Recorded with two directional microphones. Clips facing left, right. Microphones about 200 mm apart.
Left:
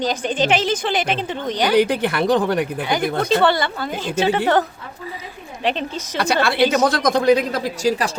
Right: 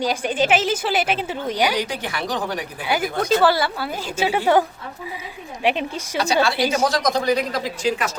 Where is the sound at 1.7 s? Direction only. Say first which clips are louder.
Left 9 dB; 60° left (ahead or behind).